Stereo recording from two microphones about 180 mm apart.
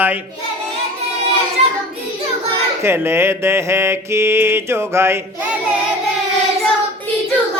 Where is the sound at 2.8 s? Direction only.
15° right (ahead or behind).